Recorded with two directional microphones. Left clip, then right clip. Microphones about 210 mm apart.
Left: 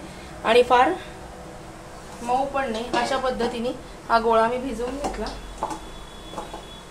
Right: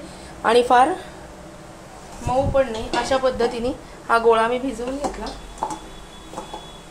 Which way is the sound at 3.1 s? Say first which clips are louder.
Right 4 dB; 45° right (ahead or behind).